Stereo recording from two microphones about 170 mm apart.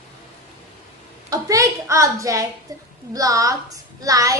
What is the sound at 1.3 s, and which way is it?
A woman's voice, 20° right (ahead or behind).